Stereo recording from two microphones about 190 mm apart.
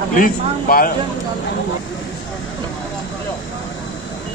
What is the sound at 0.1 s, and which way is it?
Speech, 50° left (ahead or behind).